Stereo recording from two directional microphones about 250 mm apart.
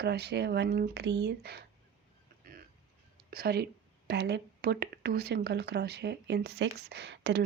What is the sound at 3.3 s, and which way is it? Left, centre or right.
Speech, right.